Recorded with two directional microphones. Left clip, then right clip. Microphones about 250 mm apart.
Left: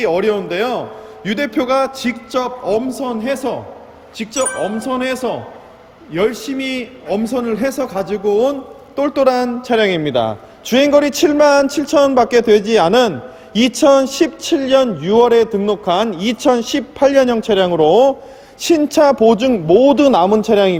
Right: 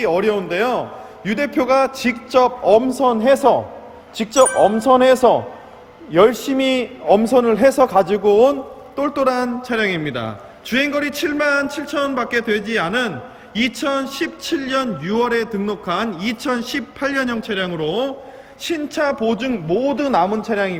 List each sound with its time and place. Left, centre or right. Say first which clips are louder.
0.0 s a man's voice: left 2 dB; centre
9.0 s a man's voice: left 4 dB; centre; by 20.7 s left